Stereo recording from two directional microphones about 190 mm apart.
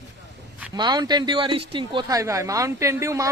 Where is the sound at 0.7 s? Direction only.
20° right (ahead or behind).